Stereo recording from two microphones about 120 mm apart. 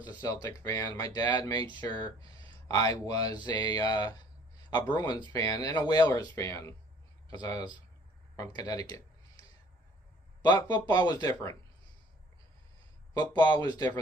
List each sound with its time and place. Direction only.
0.0 s speech: 35° left (ahead or behind)
10.4 s speech: 35° left (ahead or behind)
13.1 s speech: 35° left (ahead or behind)